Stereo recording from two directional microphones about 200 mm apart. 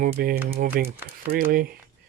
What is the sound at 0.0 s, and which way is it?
Speech, 45° right (ahead or behind).